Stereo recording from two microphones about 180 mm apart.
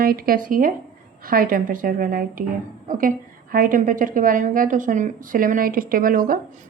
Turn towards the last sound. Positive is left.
turn(degrees=-50)  # may be behind; listen again after turning